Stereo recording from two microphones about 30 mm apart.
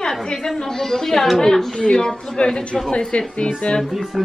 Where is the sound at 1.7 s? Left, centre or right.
Left.